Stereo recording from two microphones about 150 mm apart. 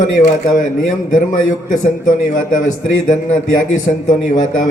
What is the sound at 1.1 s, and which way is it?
A man's voice, 55° left (ahead or behind).